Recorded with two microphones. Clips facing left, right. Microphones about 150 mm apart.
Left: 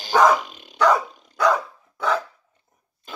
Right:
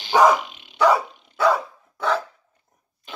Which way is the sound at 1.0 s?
40° left (ahead or behind).